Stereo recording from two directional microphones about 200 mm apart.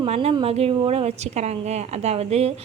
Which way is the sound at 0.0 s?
30° right (ahead or behind).